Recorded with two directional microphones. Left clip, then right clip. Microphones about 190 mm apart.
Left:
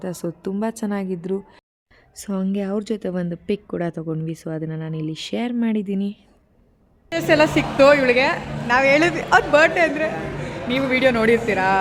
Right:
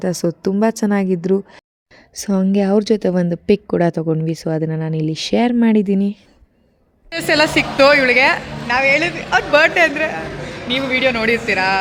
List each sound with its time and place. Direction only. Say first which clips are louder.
0.0 s a woman's voice: right 9 dB; 30° right (ahead or behind)
7.1 s a woman's voice: right 2 dB; centre (ahead or behind)
8.6 s speech: right 1 dB; 15° left (ahead or behind)
8.9 s speech: right 1 dB; 30° left (ahead or behind)
9.5 s a woman's voice: right 3 dB; 5° left (ahead or behind)
10.7 s speech: right 2 dB; 10° left (ahead or behind)